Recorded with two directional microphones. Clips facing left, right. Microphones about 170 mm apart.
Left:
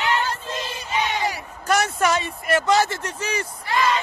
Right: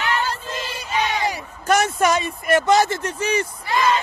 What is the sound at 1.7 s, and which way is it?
Speech, 20° right (ahead or behind).